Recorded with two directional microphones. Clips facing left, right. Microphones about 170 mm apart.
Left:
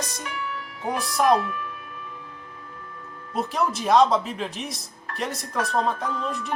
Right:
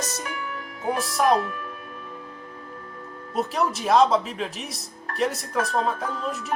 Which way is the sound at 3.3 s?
Centre (ahead or behind).